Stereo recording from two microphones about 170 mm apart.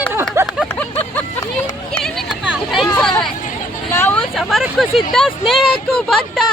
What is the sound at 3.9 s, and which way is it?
Speech, 15° left (ahead or behind).